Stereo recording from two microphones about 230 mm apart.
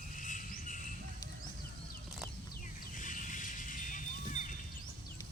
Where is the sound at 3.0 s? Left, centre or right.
Left.